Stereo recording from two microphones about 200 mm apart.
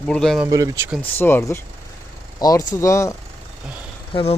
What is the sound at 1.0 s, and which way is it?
Speech, 10° left (ahead or behind).